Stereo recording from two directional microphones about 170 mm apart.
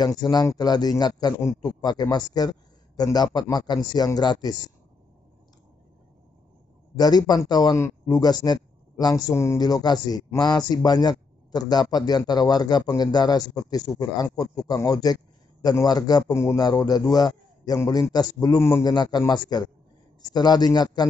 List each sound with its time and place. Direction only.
0.0 s a man's voice: 25° left (ahead or behind)
7.0 s a man's voice: 25° left (ahead or behind)